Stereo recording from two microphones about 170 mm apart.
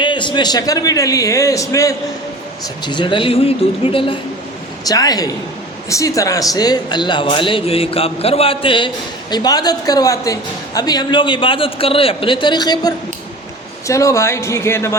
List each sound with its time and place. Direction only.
0.0 s speech: 25° left (ahead or behind)